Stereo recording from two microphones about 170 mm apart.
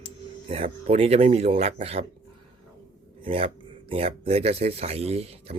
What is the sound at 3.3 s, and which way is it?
Speech, 35° right (ahead or behind).